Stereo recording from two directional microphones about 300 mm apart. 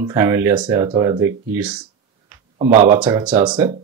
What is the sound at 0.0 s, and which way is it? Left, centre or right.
Speech, centre.